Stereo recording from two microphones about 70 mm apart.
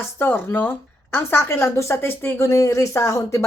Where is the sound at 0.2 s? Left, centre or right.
Left.